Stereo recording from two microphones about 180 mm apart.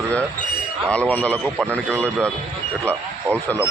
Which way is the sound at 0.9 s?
5° left (ahead or behind).